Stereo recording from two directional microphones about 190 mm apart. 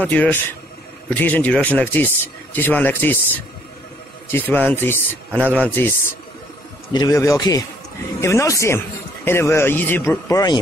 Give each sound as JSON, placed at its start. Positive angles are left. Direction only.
{"t": 0.0, "sound": "a man's voice", "side_deg": 10}
{"t": 4.3, "sound": "a man's voice", "side_deg": 10}
{"t": 6.9, "sound": "a man's voice", "side_deg": 20}